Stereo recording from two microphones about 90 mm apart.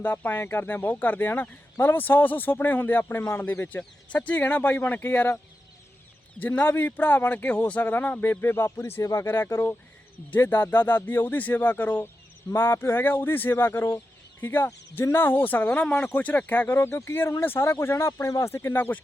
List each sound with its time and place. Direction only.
0.0 s a man's voice: 20° left (ahead or behind)
6.4 s a man's voice: 20° left (ahead or behind)
9.2 s a man's voice: 25° left (ahead or behind)